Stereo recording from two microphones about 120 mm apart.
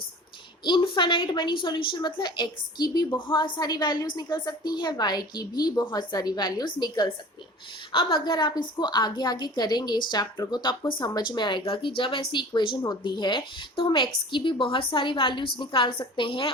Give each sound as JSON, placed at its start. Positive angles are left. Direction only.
{"t": 0.6, "sound": "a woman's voice", "side_deg": 40}